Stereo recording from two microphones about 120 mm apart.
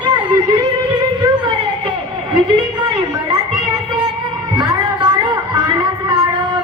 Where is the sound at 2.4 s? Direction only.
40° right (ahead or behind).